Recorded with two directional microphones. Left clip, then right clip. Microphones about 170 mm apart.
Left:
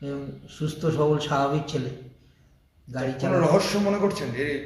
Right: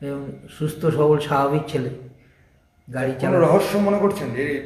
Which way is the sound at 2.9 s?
10° right (ahead or behind).